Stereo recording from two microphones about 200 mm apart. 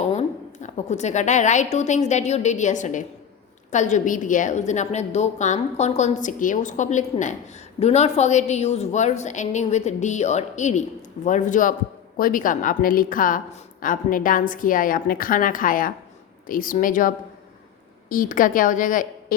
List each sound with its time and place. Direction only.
0.0 s a woman's voice: 35° left (ahead or behind)